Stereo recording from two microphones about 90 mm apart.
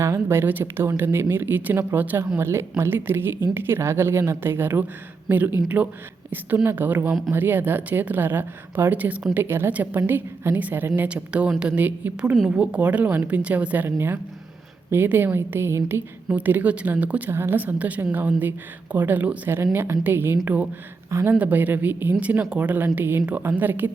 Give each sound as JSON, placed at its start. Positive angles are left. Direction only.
{"t": 0.0, "sound": "a woman's voice", "side_deg": -30}
{"t": 21.3, "sound": "a woman's voice", "side_deg": -20}